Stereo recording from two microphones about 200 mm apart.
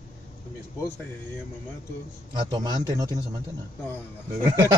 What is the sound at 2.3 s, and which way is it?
Speech, 20° right (ahead or behind).